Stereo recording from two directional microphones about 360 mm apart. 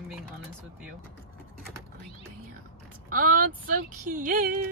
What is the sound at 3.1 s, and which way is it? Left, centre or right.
Speech, right.